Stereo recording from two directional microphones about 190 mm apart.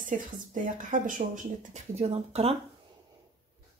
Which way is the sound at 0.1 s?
40° right (ahead or behind).